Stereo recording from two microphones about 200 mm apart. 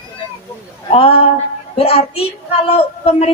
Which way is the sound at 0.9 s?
30° left (ahead or behind).